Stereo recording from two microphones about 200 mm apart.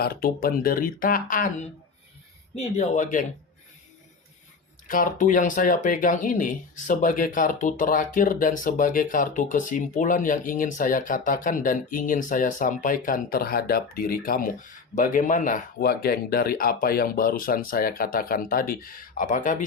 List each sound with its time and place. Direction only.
0.0 s speech: 50° left (ahead or behind)
4.9 s speech: 40° left (ahead or behind)